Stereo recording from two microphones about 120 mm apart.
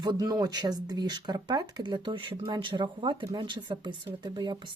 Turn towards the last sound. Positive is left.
turn(degrees=-35)  # may be behind; listen again after turning